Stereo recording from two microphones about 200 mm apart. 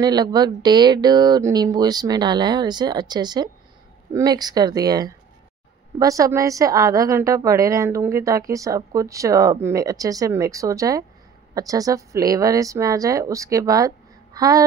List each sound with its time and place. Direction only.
0.0 s a woman's voice: 20° right (ahead or behind)